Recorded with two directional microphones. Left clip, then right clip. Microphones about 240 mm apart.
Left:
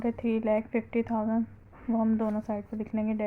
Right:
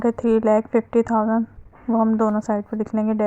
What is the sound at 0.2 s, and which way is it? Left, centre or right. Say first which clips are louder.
A woman's voice: right 10 dB; right.